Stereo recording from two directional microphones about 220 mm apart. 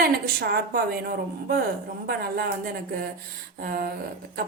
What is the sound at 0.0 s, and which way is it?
A woman's voice, 45° right (ahead or behind).